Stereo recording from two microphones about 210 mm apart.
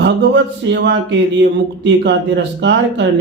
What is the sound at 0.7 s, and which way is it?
Speech, 55° right (ahead or behind).